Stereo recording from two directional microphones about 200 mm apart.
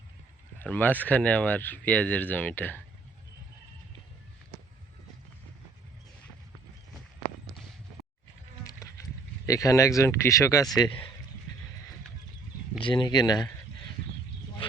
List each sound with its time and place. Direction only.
0.6 s speech: 10° left (ahead or behind)
8.6 s insect: 15° left (ahead or behind)
9.5 s speech: 15° left (ahead or behind)
12.8 s speech: 25° left (ahead or behind)